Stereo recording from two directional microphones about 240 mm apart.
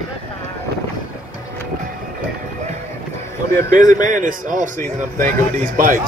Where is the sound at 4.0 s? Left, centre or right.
Right.